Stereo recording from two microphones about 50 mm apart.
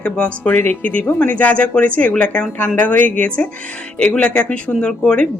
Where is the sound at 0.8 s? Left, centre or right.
Left.